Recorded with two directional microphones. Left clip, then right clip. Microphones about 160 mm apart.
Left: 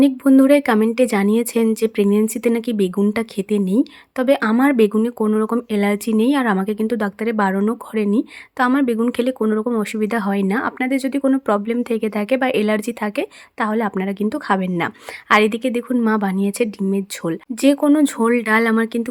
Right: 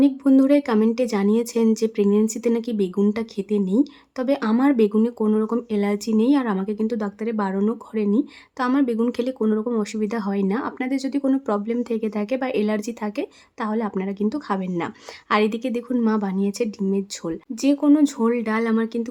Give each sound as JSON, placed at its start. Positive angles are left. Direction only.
{"t": 0.0, "sound": "speech", "side_deg": 20}